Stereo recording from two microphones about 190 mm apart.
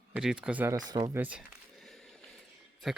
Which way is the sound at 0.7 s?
20° right (ahead or behind).